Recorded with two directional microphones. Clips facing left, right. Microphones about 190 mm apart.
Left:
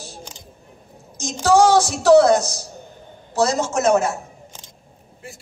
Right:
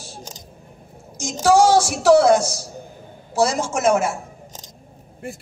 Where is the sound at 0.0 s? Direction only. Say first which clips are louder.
Even; 35° right (ahead or behind).